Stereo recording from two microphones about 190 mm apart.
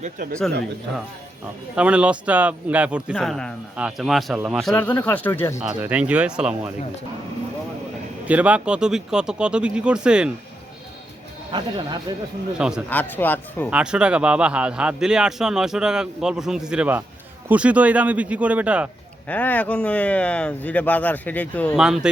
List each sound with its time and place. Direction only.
0.0 s speech: 45° right (ahead or behind)
1.7 s a man's voice: 5° right (ahead or behind); by 5.5 s 10° left (ahead or behind)
5.5 s a man's voice: 5° right (ahead or behind)
8.3 s a man's voice: 5° right (ahead or behind)
12.1 s speech: 20° right (ahead or behind)
12.5 s a man's voice: 5° right (ahead or behind)
12.9 s speech: 10° left (ahead or behind)
13.7 s a man's voice: 5° right (ahead or behind)
19.3 s speech: 10° left (ahead or behind)
21.8 s a man's voice: 5° right (ahead or behind)